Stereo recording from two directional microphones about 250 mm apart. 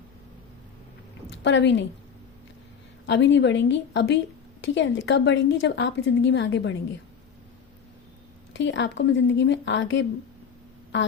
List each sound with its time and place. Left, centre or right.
1.3 s a woman's voice: left
3.1 s a woman's voice: left
8.5 s a woman's voice: left